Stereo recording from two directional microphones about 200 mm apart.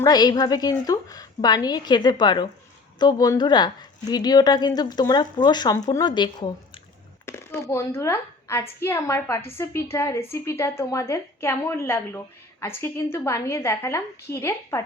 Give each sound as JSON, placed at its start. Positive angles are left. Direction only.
{"t": 0.0, "sound": "a woman's voice", "side_deg": 20}